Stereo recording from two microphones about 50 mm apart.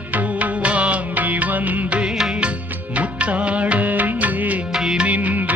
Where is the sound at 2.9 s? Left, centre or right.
Right.